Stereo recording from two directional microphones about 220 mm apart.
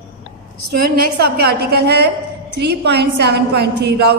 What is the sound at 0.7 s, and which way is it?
A woman's voice, 45° right (ahead or behind).